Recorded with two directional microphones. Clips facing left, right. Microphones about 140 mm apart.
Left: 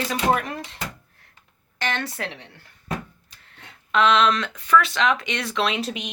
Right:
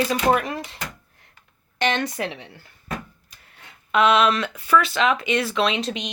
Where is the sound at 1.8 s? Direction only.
20° right (ahead or behind).